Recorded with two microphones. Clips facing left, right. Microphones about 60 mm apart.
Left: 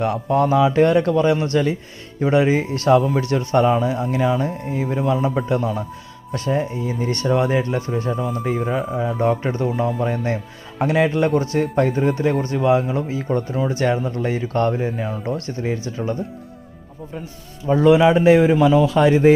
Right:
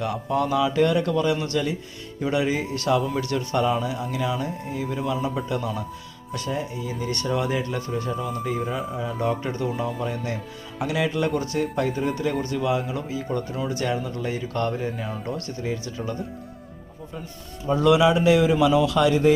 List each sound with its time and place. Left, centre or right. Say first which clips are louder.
0.0 s speech: left 6 dB; left
17.8 s speech: left 5 dB; left